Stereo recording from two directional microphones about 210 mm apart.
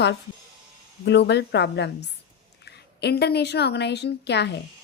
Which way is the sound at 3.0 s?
50° left (ahead or behind).